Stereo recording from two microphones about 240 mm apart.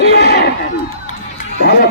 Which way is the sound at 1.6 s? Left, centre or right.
Left.